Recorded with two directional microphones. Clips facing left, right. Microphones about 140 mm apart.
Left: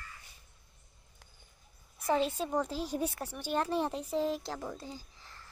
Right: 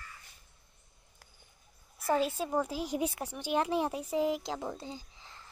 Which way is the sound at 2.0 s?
5° right (ahead or behind).